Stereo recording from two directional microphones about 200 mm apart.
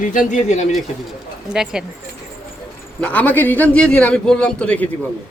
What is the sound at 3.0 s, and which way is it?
A man's voice, 5° left (ahead or behind).